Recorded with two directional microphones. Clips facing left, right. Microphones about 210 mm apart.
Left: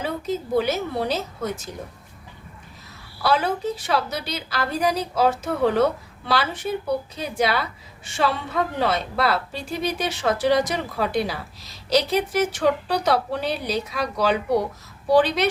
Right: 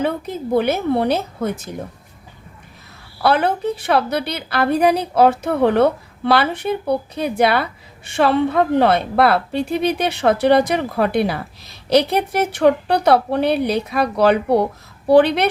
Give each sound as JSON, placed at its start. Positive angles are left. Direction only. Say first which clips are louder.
{"t": 0.0, "sound": "a woman's voice", "louder": "right 5 dB", "side_deg": -60}
{"t": 3.2, "sound": "a woman's voice", "louder": "right 5 dB", "side_deg": -60}